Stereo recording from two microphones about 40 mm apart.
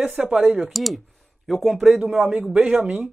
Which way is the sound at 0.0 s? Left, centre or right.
Right.